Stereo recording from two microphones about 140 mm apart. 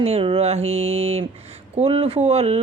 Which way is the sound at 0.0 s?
40° right (ahead or behind).